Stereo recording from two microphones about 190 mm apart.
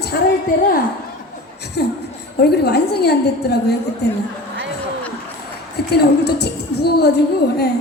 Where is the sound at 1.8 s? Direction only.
60° left (ahead or behind).